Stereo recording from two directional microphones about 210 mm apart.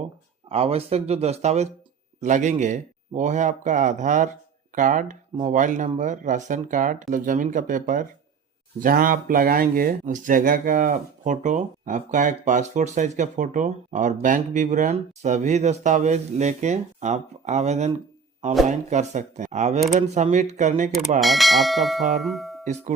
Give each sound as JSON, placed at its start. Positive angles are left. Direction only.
{"t": 0.4, "sound": "speech", "side_deg": -30}
{"t": 21.2, "sound": "speech", "side_deg": 0}
{"t": 22.6, "sound": "speech", "side_deg": -35}